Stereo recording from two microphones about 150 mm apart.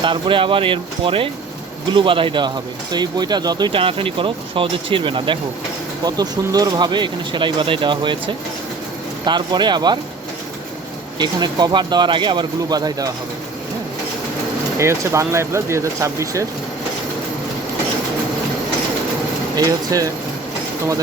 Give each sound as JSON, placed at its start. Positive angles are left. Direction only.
{"t": 0.0, "sound": "speech", "side_deg": -35}
{"t": 11.2, "sound": "speech", "side_deg": -30}
{"t": 14.8, "sound": "speech", "side_deg": -20}
{"t": 19.5, "sound": "speech", "side_deg": -25}